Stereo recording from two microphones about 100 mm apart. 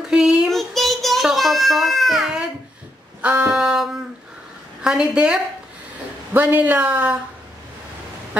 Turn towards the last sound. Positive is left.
turn(degrees=-15)  # may be behind; listen again after turning